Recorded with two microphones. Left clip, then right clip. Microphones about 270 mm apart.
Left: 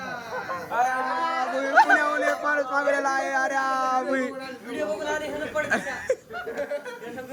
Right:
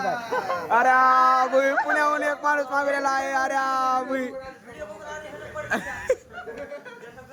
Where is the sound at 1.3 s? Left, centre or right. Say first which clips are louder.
Right 4 dB; centre.